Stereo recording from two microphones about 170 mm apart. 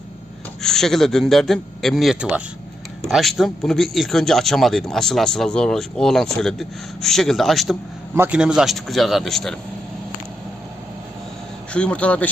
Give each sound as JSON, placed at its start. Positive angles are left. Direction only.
{"t": 0.6, "sound": "speech", "side_deg": 0}
{"t": 8.1, "sound": "speech", "side_deg": -10}
{"t": 11.7, "sound": "speech", "side_deg": 5}